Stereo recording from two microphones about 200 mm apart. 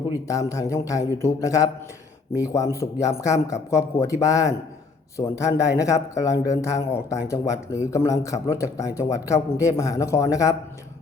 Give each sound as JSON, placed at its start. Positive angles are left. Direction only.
{"t": 0.3, "sound": "a man's voice", "side_deg": 15}